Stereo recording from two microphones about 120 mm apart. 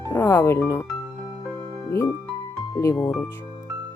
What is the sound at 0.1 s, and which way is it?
Speech, 20° left (ahead or behind).